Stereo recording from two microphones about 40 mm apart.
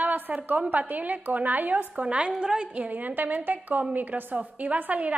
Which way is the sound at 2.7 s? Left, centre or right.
Right.